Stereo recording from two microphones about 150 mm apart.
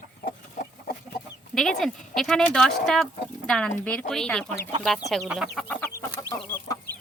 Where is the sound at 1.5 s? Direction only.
Centre (ahead or behind).